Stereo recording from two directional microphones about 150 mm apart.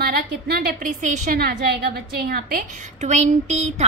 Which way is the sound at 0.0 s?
90° right.